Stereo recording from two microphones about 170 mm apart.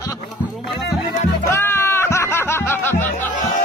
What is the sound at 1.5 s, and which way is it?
Music, 15° left (ahead or behind).